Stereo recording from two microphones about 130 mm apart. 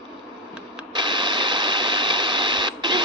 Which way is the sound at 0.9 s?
35° right (ahead or behind).